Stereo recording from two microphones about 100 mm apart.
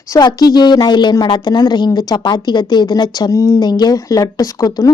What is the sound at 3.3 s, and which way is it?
Speech, 30° left (ahead or behind).